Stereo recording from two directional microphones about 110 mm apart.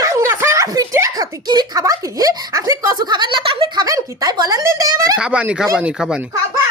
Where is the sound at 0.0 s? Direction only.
25° right (ahead or behind); by 3.7 s 55° right (ahead or behind).